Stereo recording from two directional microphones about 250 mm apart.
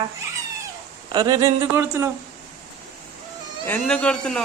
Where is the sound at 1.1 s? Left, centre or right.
Centre.